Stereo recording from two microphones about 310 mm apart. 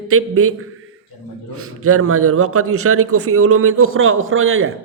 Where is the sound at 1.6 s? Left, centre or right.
Right.